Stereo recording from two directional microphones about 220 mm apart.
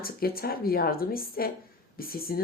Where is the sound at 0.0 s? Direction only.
45° left (ahead or behind).